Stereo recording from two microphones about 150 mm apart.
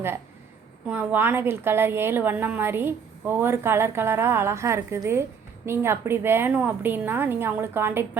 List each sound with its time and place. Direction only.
0.9 s a woman's voice: 10° right (ahead or behind)